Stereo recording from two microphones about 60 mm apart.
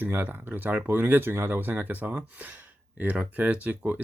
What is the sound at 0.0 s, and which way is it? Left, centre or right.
Speech, right.